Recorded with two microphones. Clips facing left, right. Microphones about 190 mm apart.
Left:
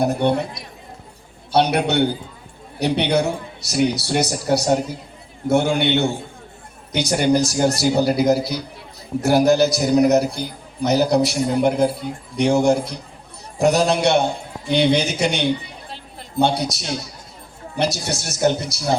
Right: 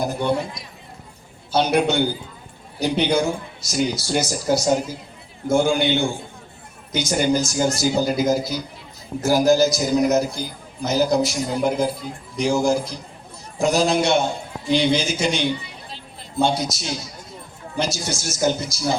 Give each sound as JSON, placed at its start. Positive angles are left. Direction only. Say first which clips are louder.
{"t": 0.0, "sound": "a man's voice", "louder": "left 3 dB", "side_deg": 65}
{"t": 17.9, "sound": "a man's voice", "louder": "left 1 dB", "side_deg": 65}